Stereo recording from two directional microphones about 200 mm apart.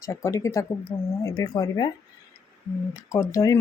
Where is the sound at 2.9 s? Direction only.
15° left (ahead or behind).